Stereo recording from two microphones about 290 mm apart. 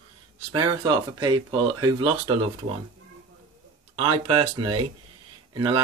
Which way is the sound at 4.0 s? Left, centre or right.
Centre.